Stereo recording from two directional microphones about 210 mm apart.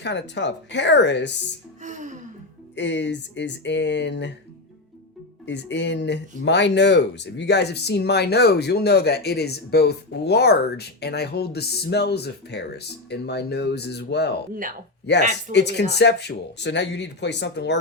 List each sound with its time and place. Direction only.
0.0 s speech: 55° left (ahead or behind)
1.8 s gasp: 35° right (ahead or behind)
2.7 s speech: 55° left (ahead or behind)
5.5 s speech: 55° left (ahead or behind)